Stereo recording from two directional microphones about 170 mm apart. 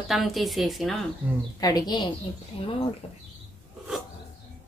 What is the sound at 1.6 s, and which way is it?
A woman's voice, 20° left (ahead or behind).